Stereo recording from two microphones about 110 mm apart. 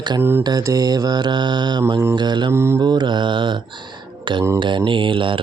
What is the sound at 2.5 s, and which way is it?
Mantra, 25° right (ahead or behind).